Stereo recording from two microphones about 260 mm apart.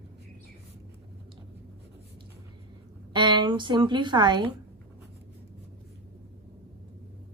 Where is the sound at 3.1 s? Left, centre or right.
Centre.